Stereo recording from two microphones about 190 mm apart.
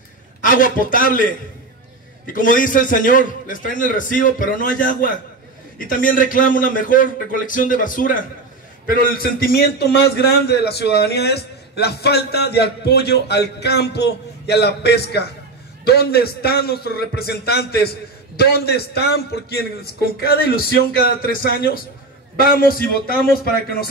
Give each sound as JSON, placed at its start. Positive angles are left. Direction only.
{"t": 0.4, "sound": "a man's voice", "side_deg": 45}
{"t": 2.3, "sound": "a man's voice", "side_deg": 45}
{"t": 22.4, "sound": "a man's voice", "side_deg": 50}